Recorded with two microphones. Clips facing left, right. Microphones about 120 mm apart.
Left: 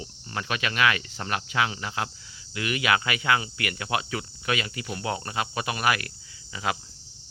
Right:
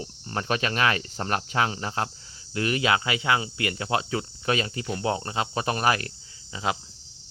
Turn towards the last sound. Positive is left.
turn(degrees=-25)  # may be behind; listen again after turning